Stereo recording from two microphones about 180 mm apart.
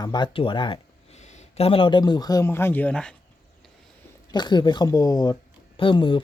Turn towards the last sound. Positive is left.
turn(degrees=25)  # may be behind; listen again after turning